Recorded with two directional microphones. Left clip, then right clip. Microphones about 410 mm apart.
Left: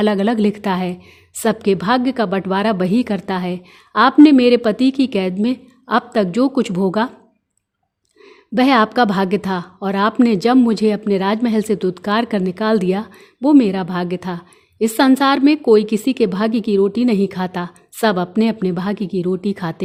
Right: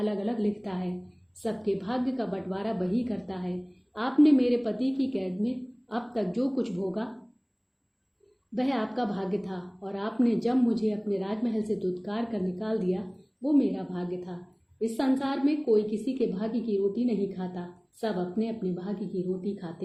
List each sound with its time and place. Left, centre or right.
0.0 s a woman's voice: left
8.5 s a woman's voice: left